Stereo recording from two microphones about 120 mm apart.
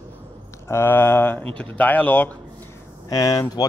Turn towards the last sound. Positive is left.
turn(degrees=30)  # may be behind; listen again after turning